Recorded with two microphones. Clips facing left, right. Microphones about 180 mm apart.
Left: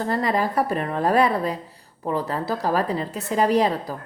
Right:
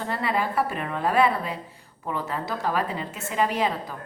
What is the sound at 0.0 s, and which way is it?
A woman's voice, 40° left (ahead or behind).